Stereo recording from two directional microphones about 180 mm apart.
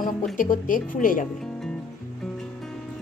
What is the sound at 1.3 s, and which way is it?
Music, centre (ahead or behind).